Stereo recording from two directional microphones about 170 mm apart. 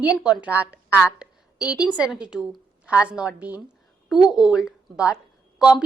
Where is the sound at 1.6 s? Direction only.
20° left (ahead or behind).